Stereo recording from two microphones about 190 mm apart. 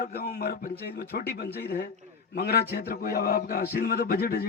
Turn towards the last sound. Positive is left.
turn(degrees=55)  # may be behind; listen again after turning